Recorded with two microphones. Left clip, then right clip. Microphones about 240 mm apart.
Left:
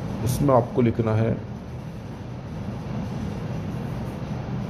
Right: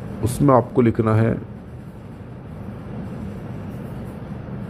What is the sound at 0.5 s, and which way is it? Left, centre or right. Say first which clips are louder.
Speech: right 4 dB; right.